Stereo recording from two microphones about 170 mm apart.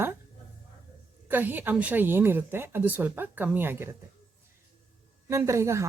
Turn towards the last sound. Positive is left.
turn(degrees=-15)  # may be behind; listen again after turning